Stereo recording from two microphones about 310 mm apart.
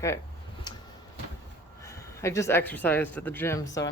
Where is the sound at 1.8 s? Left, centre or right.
Centre.